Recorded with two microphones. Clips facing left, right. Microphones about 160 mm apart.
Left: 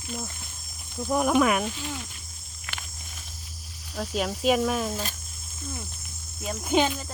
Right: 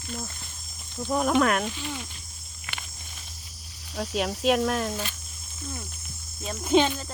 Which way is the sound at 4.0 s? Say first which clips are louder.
Even; centre (ahead or behind).